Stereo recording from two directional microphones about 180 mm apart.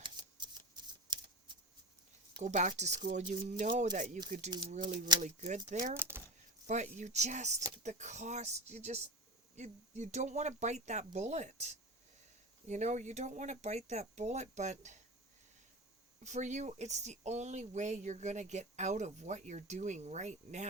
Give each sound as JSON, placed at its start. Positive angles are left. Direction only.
{"t": 0.0, "sound": "shuffling cards", "side_deg": -25}
{"t": 2.4, "sound": "speech", "side_deg": -45}
{"t": 6.0, "sound": "speech", "side_deg": -10}
{"t": 6.7, "sound": "speech", "side_deg": -40}
{"t": 16.2, "sound": "speech", "side_deg": -40}